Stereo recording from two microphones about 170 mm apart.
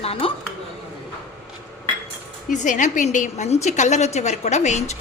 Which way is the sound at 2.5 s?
45° left (ahead or behind).